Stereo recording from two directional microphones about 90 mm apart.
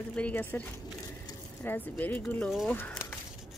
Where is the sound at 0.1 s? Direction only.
15° left (ahead or behind).